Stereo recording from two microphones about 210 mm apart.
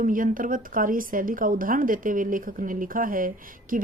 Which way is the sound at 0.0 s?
40° right (ahead or behind).